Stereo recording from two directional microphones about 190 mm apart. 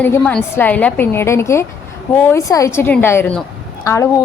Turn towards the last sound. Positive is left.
turn(degrees=15)  # may be behind; listen again after turning